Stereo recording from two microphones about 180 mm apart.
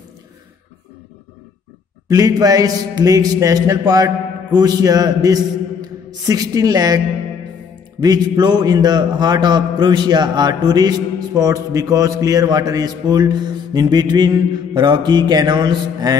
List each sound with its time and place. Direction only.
2.0 s a man's voice: 20° right (ahead or behind)
8.0 s a man's voice: 20° right (ahead or behind)